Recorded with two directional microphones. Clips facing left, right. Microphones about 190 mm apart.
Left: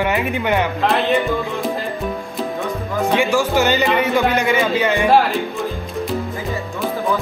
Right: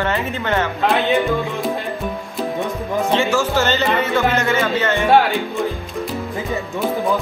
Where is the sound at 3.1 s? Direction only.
15° left (ahead or behind).